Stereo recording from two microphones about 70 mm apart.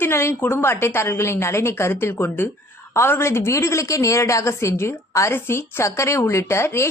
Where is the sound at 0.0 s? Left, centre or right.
Left.